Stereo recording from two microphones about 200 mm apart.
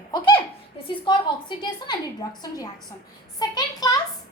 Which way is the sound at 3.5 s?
20° left (ahead or behind).